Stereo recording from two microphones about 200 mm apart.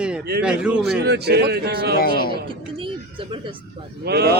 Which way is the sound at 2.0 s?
50° left (ahead or behind).